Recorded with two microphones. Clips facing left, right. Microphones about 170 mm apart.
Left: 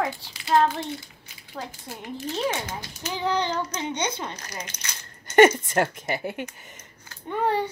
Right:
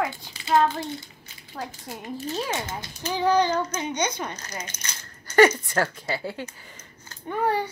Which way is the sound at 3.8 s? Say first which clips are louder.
Right 1 dB; 25° left (ahead or behind).